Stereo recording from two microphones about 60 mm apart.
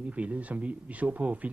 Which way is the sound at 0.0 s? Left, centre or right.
Right.